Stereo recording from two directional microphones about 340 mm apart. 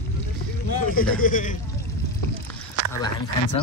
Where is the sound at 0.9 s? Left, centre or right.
Left.